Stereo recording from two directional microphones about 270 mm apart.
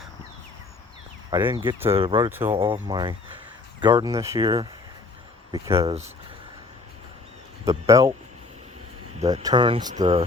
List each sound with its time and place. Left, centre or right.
1.3 s speech: centre
1.9 s speech: centre
2.3 s speech: centre
7.6 s speech: centre
9.1 s speech: right